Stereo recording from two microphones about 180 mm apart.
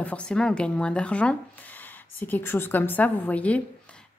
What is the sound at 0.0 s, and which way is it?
A woman's voice, 5° left (ahead or behind).